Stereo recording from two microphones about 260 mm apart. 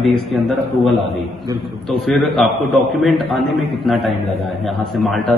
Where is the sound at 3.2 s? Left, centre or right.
Right.